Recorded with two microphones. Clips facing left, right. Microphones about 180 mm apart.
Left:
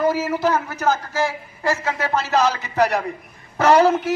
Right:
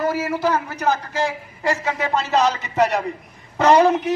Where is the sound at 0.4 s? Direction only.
10° right (ahead or behind).